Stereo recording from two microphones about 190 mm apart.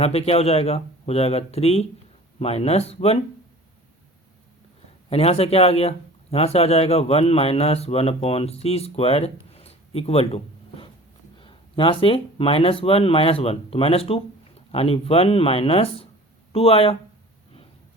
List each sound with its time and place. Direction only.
0.0 s speech: 35° left (ahead or behind)
5.0 s speech: 30° left (ahead or behind)